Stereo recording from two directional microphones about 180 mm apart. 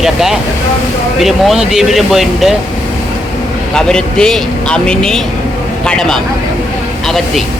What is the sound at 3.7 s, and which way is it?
Speech, 5° left (ahead or behind).